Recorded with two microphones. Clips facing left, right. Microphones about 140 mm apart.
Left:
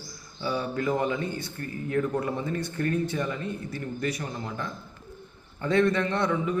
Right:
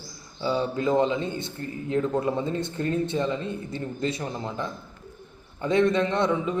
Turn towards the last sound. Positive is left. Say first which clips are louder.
# right 2 dB
turn(degrees=-20)  # may be behind; listen again after turning